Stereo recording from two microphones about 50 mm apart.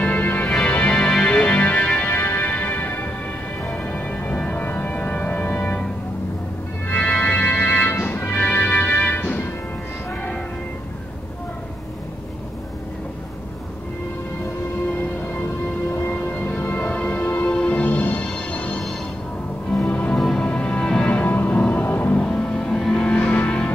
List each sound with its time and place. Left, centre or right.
0.0 s music: left
0.7 s music: left
2.0 s music: left
2.4 s music: left
7.0 s organ: centre
7.4 s music: left
16.1 s music: left
17.5 s music: left
20.2 s music: centre
20.4 s music: left
21.1 s music: left
22.1 s music: centre
23.0 s music: left